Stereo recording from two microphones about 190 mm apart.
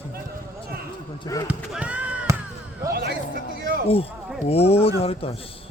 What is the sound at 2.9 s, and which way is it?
Speech, 55° right (ahead or behind).